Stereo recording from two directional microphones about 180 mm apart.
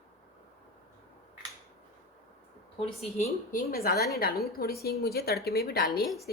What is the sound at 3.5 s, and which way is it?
A woman's voice, 55° left (ahead or behind).